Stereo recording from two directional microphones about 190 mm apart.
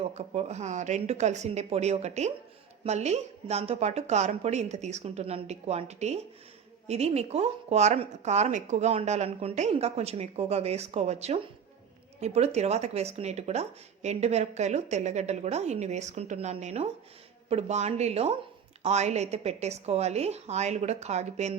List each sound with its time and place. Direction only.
0.0 s speech: 35° right (ahead or behind)